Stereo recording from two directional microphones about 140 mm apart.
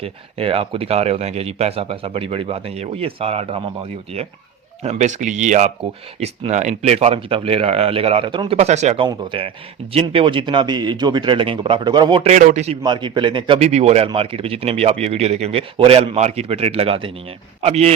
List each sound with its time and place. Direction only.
0.0 s speech: 45° right (ahead or behind)
4.8 s speech: 55° right (ahead or behind)
9.0 s speech: 40° right (ahead or behind)
12.2 s speech: 55° right (ahead or behind)
12.8 s speech: 35° right (ahead or behind)
13.6 s speech: 50° right (ahead or behind)